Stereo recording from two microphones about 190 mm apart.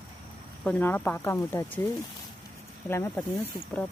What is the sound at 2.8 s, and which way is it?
Speech, 10° left (ahead or behind).